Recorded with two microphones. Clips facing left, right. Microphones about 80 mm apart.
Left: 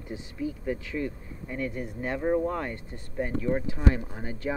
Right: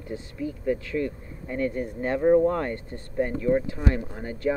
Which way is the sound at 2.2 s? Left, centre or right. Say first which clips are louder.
Right 7 dB; centre.